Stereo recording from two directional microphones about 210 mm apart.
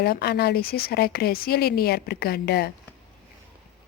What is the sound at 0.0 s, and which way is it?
A woman's voice, 50° left (ahead or behind).